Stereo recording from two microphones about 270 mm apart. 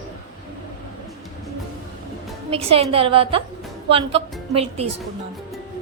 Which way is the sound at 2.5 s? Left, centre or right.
Right.